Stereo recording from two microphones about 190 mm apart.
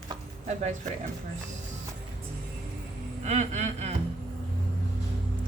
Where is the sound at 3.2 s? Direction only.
35° right (ahead or behind).